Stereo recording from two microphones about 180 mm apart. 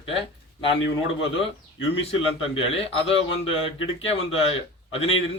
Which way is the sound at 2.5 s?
30° left (ahead or behind).